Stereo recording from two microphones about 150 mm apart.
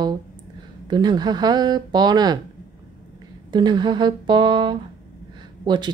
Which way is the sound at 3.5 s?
30° right (ahead or behind).